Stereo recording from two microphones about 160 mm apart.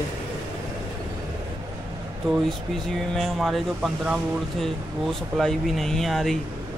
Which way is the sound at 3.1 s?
Centre (ahead or behind).